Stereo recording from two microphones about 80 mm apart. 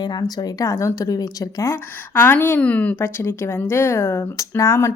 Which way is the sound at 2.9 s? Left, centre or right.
Left.